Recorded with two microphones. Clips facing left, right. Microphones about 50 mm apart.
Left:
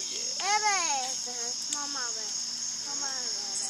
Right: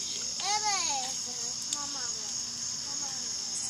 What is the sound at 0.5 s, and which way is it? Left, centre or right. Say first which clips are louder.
Babbling: left 5 dB; left.